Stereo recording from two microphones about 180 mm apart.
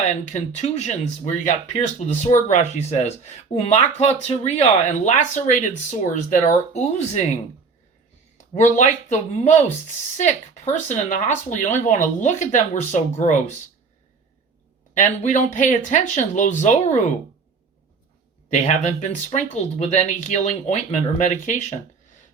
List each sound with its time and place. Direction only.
0.0 s speech: 40° left (ahead or behind)
8.4 s speech: 40° left (ahead or behind)
14.9 s speech: 45° left (ahead or behind)
18.5 s speech: 40° left (ahead or behind)